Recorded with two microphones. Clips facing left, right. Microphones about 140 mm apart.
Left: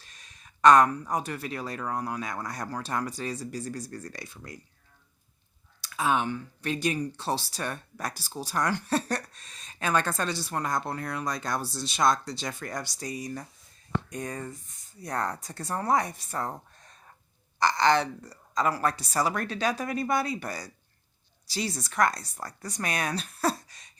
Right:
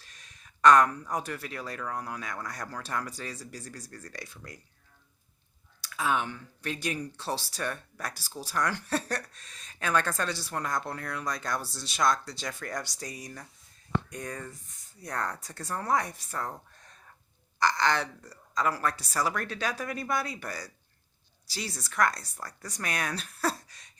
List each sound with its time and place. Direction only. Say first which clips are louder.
0.6 s speech: left 2 dB; 20° left (ahead or behind)
5.8 s speech: left 3 dB; 20° left (ahead or behind)
17.6 s speech: left 4 dB; 20° left (ahead or behind)